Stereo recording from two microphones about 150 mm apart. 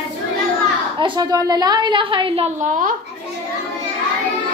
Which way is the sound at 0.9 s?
30° right (ahead or behind).